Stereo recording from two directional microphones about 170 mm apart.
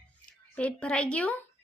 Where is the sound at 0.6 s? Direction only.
10° left (ahead or behind).